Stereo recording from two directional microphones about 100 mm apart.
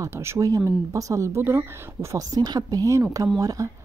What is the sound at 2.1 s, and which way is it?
Speech, 40° right (ahead or behind).